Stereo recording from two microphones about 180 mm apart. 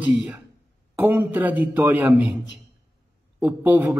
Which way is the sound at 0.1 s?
Centre (ahead or behind).